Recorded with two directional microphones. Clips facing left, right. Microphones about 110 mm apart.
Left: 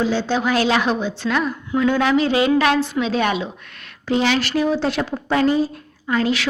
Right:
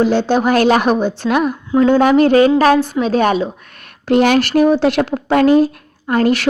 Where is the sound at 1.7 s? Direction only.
35° right (ahead or behind).